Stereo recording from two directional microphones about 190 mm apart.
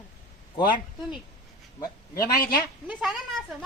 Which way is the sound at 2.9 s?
Centre (ahead or behind).